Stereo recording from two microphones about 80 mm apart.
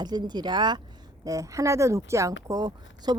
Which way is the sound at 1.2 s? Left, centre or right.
Right.